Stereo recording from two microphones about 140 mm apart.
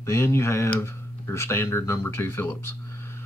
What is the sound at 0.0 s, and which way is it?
Speech, 20° left (ahead or behind).